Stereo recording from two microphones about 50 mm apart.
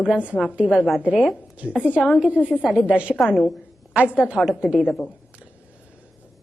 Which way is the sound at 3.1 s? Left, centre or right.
Centre.